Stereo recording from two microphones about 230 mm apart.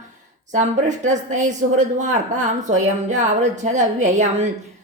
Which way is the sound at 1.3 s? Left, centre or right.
Right.